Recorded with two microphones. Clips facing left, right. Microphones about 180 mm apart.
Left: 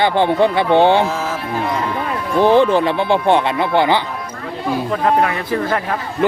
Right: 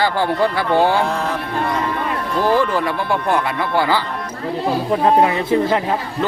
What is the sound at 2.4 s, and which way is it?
Speech, 25° left (ahead or behind).